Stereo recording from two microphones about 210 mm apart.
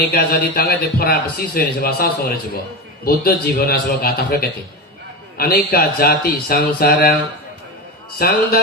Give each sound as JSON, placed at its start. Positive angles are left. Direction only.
{"t": 0.1, "sound": "speech", "side_deg": 45}
{"t": 8.2, "sound": "speech", "side_deg": 45}